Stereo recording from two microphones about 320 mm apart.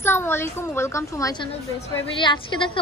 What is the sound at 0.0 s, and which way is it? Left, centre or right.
A woman's voice, centre.